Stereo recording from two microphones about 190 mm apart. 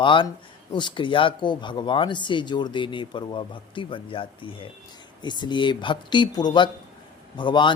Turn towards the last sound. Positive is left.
turn(degrees=25)  # may be behind; listen again after turning